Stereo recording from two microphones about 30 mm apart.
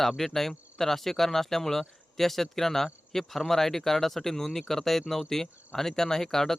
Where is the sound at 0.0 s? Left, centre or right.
Centre.